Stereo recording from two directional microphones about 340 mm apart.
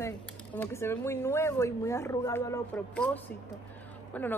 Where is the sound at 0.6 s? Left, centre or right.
Centre.